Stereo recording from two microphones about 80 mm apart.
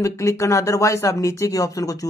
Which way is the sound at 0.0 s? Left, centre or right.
Left.